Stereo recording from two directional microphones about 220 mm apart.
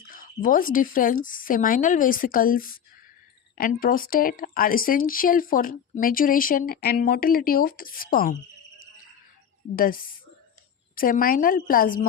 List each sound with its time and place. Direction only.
0.1 s speech: 40° left (ahead or behind)
9.7 s speech: 40° left (ahead or behind)